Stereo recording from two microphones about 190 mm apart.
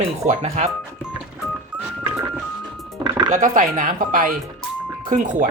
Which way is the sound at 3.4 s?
40° right (ahead or behind).